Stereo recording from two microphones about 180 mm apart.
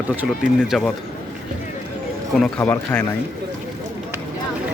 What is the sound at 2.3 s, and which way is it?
Speech, 5° left (ahead or behind).